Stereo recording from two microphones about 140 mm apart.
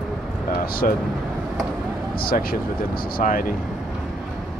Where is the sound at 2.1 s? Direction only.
90° left.